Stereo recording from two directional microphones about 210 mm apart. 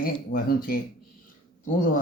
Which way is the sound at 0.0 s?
45° left (ahead or behind).